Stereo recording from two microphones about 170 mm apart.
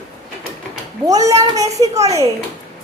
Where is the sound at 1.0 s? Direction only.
20° right (ahead or behind).